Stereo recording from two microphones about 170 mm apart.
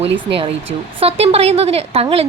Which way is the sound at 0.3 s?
35° right (ahead or behind).